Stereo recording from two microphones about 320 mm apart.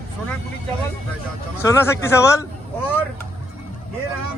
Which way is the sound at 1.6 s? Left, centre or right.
Centre.